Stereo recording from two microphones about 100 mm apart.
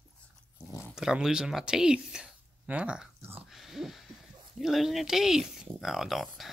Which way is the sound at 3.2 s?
20° right (ahead or behind).